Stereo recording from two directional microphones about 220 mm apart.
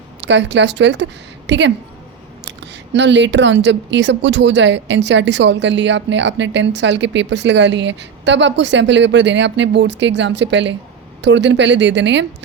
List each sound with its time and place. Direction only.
0.2 s a woman's voice: 55° right (ahead or behind)
2.9 s a woman's voice: 55° right (ahead or behind)